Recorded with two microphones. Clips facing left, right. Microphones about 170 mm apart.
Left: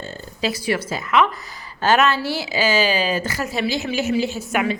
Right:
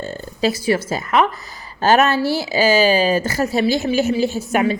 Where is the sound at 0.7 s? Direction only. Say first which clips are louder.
Right 3 dB; 45° right (ahead or behind).